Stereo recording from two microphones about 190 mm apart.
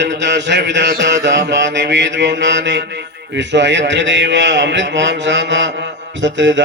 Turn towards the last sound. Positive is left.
turn(degrees=-70)  # may be behind; listen again after turning